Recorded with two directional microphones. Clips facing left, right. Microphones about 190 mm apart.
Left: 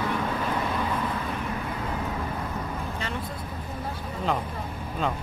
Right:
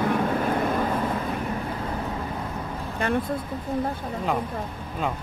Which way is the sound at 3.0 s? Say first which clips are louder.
Right 13 dB; 55° right (ahead or behind).